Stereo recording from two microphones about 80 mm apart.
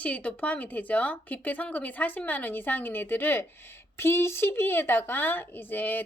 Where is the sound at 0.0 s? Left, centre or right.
Centre.